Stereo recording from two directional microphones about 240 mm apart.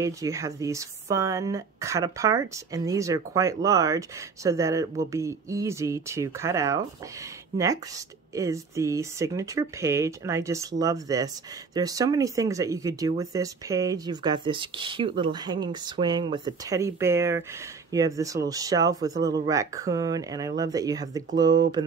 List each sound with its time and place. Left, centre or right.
0.0 s speech: centre